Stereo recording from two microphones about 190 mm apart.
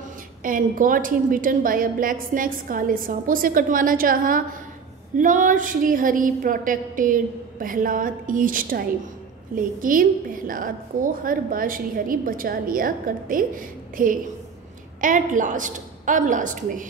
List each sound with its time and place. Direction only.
0.4 s a woman's voice: 45° right (ahead or behind)